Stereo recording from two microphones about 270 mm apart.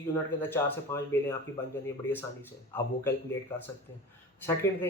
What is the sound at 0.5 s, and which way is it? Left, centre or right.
Speech, centre.